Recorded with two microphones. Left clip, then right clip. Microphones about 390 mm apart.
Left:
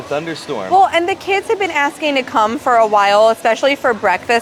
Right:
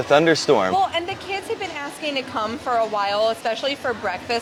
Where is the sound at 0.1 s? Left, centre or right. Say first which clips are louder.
Right 6 dB; right.